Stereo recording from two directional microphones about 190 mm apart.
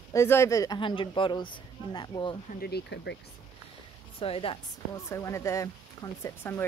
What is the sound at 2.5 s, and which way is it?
Speech, 55° left (ahead or behind).